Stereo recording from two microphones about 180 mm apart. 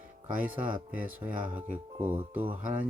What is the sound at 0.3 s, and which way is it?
Speech, 10° right (ahead or behind).